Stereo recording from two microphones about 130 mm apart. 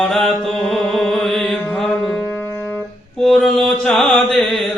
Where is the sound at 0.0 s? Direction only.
Centre (ahead or behind).